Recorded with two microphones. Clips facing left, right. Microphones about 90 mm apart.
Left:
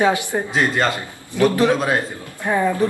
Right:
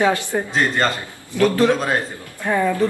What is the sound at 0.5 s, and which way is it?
Speech, 5° left (ahead or behind).